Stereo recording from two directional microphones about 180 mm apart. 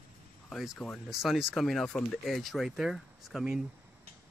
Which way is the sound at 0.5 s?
Centre (ahead or behind).